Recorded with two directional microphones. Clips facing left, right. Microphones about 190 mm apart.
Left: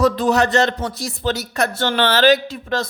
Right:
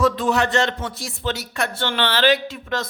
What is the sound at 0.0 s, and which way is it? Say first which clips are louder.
A woman's voice: left 3 dB; 40° left (ahead or behind).